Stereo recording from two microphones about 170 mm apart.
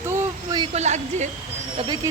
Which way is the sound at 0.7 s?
40° right (ahead or behind).